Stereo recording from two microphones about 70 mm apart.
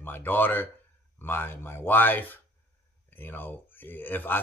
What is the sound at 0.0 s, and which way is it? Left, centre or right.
A man's voice, left.